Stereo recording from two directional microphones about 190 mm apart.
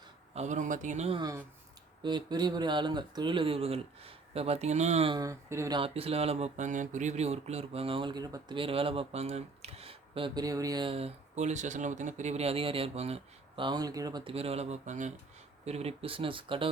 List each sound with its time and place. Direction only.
0.3 s speech: 40° right (ahead or behind)
1.2 s speech: 15° right (ahead or behind); by 5.1 s 35° right (ahead or behind)
5.1 s speech: 15° right (ahead or behind)